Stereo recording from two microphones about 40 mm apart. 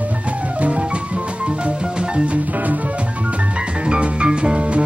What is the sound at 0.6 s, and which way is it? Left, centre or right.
Music, right.